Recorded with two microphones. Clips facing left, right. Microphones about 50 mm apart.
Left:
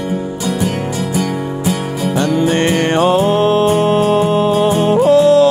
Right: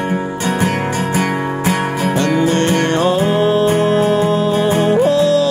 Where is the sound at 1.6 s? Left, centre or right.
Right.